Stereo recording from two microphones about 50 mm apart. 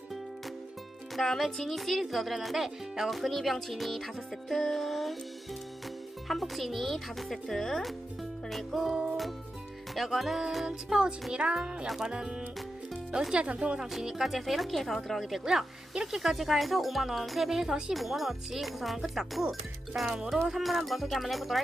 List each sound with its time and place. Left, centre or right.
1.1 s speech: centre
6.2 s speech: centre
10.7 s speech: centre
13.9 s speech: centre
17.9 s speech: centre
20.1 s speech: centre
20.5 s speech: centre